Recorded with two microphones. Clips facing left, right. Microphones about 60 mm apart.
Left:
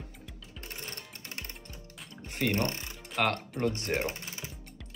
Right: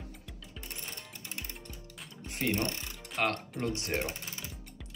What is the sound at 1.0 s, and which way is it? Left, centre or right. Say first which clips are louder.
Music: left 1 dB; left.